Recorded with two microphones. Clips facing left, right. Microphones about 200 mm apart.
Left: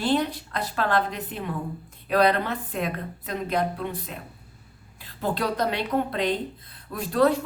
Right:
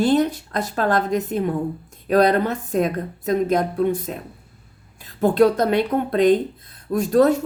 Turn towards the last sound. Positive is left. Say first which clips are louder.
# right 6 dB
turn(degrees=-45)  # may be behind; listen again after turning